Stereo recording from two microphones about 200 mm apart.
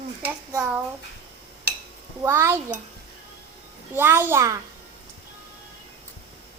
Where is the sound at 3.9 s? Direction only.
10° right (ahead or behind).